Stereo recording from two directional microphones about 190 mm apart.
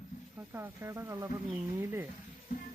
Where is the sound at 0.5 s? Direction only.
15° right (ahead or behind).